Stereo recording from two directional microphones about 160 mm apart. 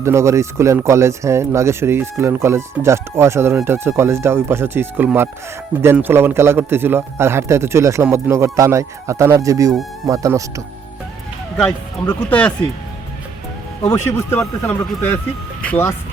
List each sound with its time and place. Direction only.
0.0 s speech: 20° right (ahead or behind)
12.3 s speech: 10° left (ahead or behind)
13.8 s speech: 15° left (ahead or behind)